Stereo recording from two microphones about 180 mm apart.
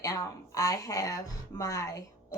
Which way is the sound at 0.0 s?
20° left (ahead or behind).